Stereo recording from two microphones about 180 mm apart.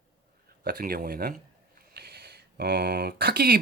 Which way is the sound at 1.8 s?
60° right (ahead or behind).